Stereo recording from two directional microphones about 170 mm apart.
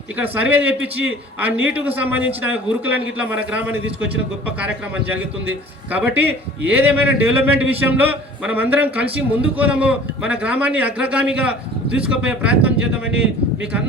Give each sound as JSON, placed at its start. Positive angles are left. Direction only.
{"t": 0.2, "sound": "a man's voice", "side_deg": -10}
{"t": 5.9, "sound": "a man's voice", "side_deg": -10}